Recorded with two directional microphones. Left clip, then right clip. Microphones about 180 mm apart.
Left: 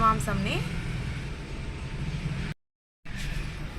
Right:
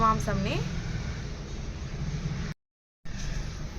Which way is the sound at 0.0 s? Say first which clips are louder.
Left 1 dB; 15° right (ahead or behind).